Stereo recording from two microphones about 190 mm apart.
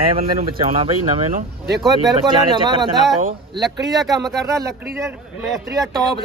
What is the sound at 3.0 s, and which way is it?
Speech, centre (ahead or behind).